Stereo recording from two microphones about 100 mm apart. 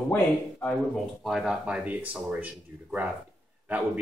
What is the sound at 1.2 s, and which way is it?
Speech, 5° right (ahead or behind).